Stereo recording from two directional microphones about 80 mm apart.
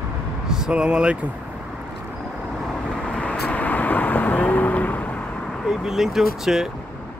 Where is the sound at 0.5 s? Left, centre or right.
Centre.